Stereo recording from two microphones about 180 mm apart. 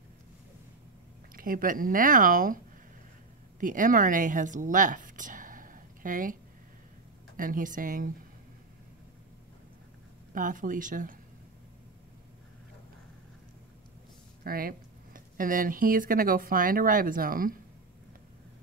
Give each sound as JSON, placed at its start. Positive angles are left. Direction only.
{"t": 1.3, "sound": "speech", "side_deg": -50}
{"t": 7.3, "sound": "speech", "side_deg": -50}
{"t": 10.3, "sound": "speech", "side_deg": -50}
{"t": 14.4, "sound": "speech", "side_deg": -55}